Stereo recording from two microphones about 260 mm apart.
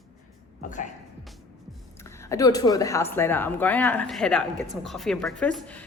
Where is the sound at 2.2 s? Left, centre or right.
Centre.